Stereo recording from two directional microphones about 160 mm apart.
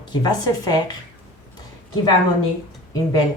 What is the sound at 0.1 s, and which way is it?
Speech, 25° left (ahead or behind).